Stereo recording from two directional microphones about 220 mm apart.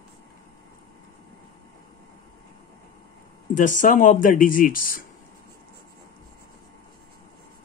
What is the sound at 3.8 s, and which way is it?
Speech, 35° left (ahead or behind).